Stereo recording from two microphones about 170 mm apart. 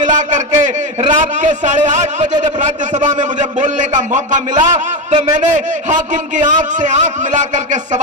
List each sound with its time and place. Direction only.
0.0 s a man's voice: 45° right (ahead or behind)